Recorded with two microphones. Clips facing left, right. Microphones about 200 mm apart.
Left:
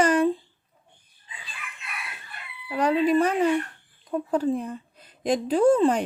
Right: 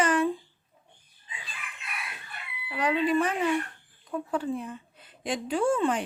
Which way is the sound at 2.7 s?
40° left (ahead or behind).